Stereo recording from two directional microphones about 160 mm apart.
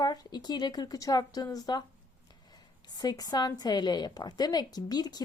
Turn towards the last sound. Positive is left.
turn(degrees=25)  # may be behind; listen again after turning